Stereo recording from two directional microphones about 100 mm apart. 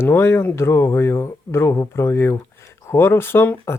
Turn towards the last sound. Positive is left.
turn(degrees=20)  # may be behind; listen again after turning